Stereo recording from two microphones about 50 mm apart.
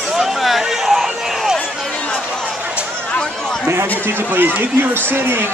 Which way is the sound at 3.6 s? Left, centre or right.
Right.